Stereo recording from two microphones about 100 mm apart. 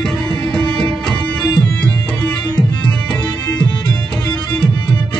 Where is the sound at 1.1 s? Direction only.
45° left (ahead or behind).